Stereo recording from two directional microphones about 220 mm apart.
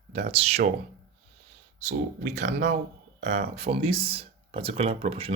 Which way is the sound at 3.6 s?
25° right (ahead or behind).